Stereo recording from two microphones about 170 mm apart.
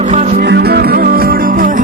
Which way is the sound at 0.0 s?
40° right (ahead or behind).